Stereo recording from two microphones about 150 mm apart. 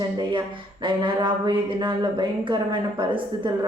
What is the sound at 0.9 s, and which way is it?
Speech, 35° right (ahead or behind).